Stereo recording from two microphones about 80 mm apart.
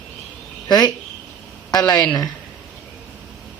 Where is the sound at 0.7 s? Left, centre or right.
Left.